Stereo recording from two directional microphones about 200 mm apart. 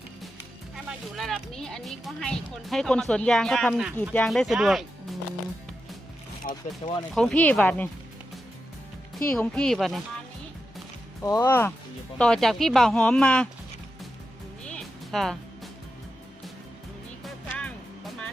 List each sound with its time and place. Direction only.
0.9 s speech: centre (ahead or behind)
6.4 s speech: 40° left (ahead or behind)
7.1 s speech: 5° left (ahead or behind)
9.1 s speech: 5° left (ahead or behind)
11.2 s speech: 15° left (ahead or behind)
14.6 s music: 5° left (ahead or behind)
17.2 s music: 5° left (ahead or behind)